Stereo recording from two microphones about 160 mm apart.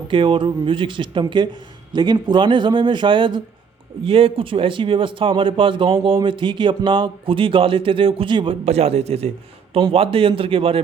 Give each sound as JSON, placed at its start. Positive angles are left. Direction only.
{"t": 0.1, "sound": "a man's voice", "side_deg": -30}